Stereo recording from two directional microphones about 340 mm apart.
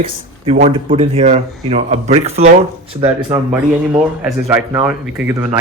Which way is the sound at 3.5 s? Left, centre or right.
Centre.